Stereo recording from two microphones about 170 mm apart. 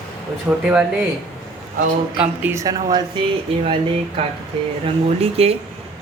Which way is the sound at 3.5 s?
35° right (ahead or behind).